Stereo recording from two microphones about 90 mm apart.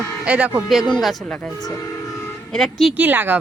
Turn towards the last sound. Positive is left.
turn(degrees=-20)  # may be behind; listen again after turning